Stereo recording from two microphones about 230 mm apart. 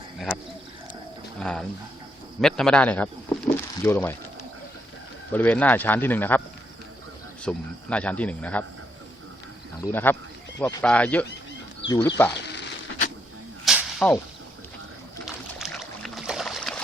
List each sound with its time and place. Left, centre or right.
1.4 s a man's voice: centre
3.4 s a sound: centre
5.3 s speech: centre
7.4 s a man's voice: centre
9.8 s speech: centre
12.3 s a sound: left
13.7 s snake: centre
15.5 s boat: centre